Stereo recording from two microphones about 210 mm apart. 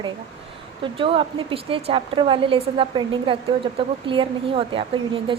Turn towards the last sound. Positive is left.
turn(degrees=-25)  # may be behind; listen again after turning